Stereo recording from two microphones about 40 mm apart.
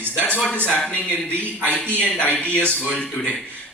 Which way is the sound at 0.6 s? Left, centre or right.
Left.